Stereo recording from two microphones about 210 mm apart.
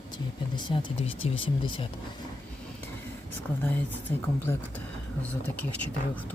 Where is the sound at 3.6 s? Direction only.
10° left (ahead or behind).